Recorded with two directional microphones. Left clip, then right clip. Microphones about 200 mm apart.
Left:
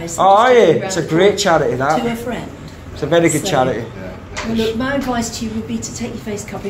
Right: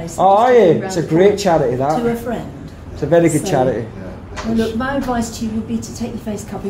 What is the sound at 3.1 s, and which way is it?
Speech, 30° right (ahead or behind).